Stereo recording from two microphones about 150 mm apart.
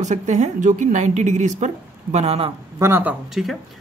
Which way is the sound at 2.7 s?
15° right (ahead or behind).